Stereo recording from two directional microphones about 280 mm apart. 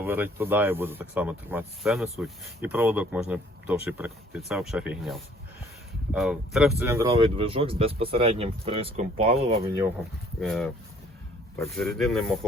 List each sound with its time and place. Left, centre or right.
0.0 s speech: centre
10.4 s speech: centre